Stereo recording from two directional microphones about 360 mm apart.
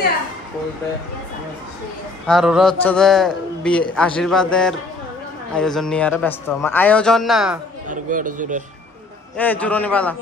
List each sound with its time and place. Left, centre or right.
2.2 s a man's voice: centre
3.8 s a man's voice: centre
4.2 s a man's voice: centre
7.9 s speech: right
9.4 s a man's voice: centre